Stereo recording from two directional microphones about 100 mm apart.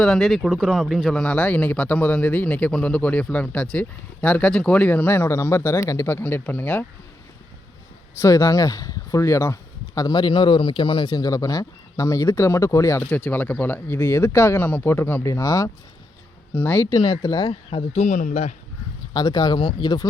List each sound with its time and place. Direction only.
0.0 s speech: 5° left (ahead or behind)
8.2 s speech: 30° left (ahead or behind); by 11.1 s 60° left (ahead or behind)
11.1 s speech: 40° left (ahead or behind)
13.1 s speech: 15° left (ahead or behind); by 15.7 s 35° left (ahead or behind)
16.6 s speech: 20° left (ahead or behind)
16.9 s speech: 45° left (ahead or behind)
17.5 s speech: 85° left
19.1 s speech: 45° left (ahead or behind)